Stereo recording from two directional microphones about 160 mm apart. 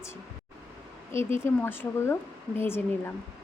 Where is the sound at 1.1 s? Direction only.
15° left (ahead or behind).